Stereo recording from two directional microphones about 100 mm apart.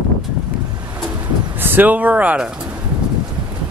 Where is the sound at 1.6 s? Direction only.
20° right (ahead or behind).